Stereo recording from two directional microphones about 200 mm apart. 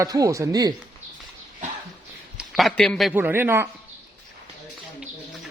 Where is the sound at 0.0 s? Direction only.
15° right (ahead or behind).